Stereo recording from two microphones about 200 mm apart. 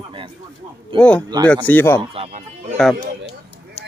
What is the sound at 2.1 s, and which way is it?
Speech, 35° right (ahead or behind).